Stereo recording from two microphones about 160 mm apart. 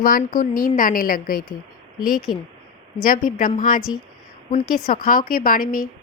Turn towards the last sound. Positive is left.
turn(degrees=60)  # may be behind; listen again after turning